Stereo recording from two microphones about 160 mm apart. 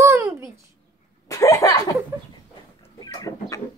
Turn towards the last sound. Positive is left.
turn(degrees=20)  # may be behind; listen again after turning